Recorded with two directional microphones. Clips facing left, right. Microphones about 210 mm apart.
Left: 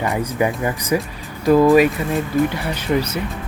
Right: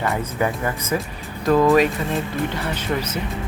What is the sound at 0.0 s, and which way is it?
Speech, 15° left (ahead or behind).